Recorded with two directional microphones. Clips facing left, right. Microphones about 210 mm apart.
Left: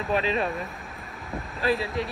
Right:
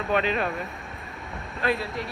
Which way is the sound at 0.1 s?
30° left (ahead or behind).